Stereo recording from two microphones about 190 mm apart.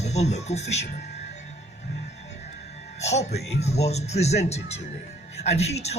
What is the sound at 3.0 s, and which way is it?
Speech, 35° left (ahead or behind).